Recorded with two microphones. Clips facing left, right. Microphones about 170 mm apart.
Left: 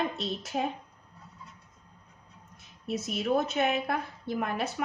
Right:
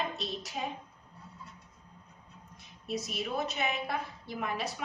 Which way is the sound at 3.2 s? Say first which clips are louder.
Left 9 dB; 55° left (ahead or behind).